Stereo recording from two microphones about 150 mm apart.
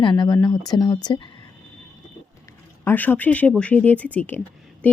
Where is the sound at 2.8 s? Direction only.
10° left (ahead or behind).